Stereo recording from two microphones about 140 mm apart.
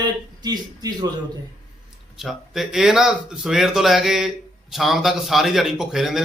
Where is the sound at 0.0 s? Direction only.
30° right (ahead or behind).